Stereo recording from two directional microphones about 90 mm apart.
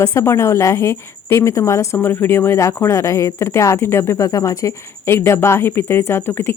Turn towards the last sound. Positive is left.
turn(degrees=25)  # may be behind; listen again after turning